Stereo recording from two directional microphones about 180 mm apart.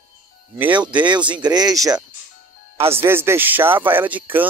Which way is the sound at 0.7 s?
25° right (ahead or behind).